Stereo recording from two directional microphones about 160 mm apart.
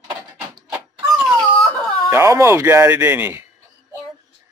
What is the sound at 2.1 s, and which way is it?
Speech, 15° right (ahead or behind).